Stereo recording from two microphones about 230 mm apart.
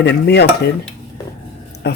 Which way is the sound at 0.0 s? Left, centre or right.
Left.